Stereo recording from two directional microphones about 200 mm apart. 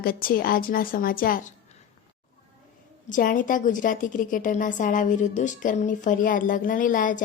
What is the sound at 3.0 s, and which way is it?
A woman's voice, 40° left (ahead or behind).